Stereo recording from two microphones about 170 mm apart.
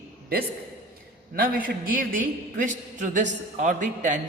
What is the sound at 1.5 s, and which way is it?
Speech, 55° right (ahead or behind).